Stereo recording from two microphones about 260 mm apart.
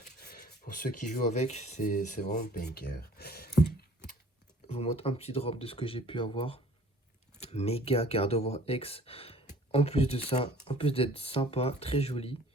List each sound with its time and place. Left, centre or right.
0.2 s speech: left
4.6 s speech: left